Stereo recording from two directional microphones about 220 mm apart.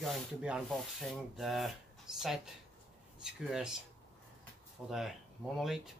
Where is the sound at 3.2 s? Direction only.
5° right (ahead or behind).